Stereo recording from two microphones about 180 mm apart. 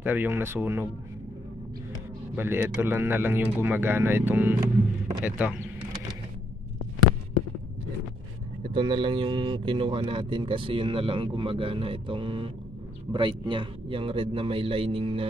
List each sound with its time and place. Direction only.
0.0 s speech: 10° right (ahead or behind)
2.3 s speech: 10° right (ahead or behind)
8.6 s speech: 25° right (ahead or behind)